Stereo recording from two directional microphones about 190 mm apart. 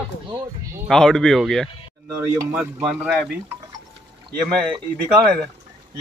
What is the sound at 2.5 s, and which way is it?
Speech, 5° right (ahead or behind).